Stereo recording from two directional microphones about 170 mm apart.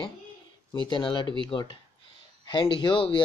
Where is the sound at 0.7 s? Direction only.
30° left (ahead or behind).